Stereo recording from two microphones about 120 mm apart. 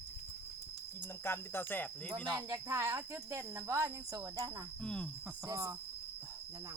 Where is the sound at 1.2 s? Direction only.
20° left (ahead or behind).